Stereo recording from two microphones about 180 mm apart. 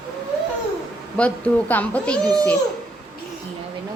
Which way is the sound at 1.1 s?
5° left (ahead or behind).